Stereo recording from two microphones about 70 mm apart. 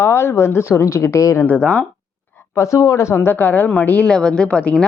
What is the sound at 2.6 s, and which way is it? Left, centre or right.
Speech, left.